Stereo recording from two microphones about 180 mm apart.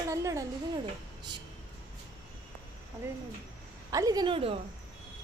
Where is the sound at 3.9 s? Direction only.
20° right (ahead or behind).